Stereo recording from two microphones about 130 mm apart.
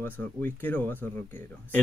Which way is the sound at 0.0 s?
15° left (ahead or behind).